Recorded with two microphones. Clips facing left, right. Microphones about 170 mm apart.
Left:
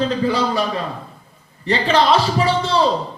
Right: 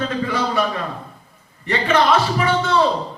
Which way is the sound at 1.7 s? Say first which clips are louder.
Left 1 dB; 30° left (ahead or behind).